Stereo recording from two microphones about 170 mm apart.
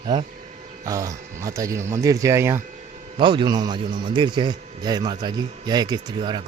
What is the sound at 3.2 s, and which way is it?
A man's voice, 30° right (ahead or behind).